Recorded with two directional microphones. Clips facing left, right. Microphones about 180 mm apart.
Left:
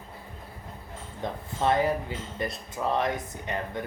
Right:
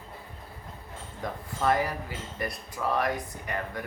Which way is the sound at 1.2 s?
25° left (ahead or behind).